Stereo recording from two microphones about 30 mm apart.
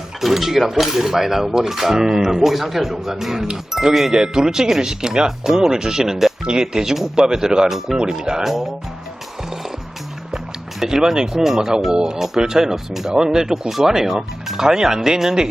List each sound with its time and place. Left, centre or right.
0.2 s speech: centre; by 8.4 s right
8.4 s speech: centre
10.3 s speech: centre
13.1 s speech: right